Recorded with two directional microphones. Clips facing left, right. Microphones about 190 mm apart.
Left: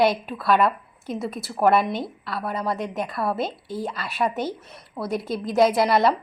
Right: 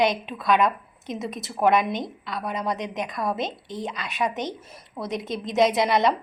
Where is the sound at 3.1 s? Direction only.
5° left (ahead or behind).